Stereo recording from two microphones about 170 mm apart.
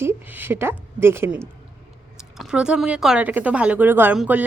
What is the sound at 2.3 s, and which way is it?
A woman's voice, 5° right (ahead or behind).